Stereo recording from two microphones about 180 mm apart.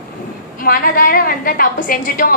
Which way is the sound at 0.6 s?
55° left (ahead or behind).